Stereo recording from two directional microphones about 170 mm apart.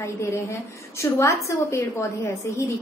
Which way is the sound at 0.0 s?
15° left (ahead or behind).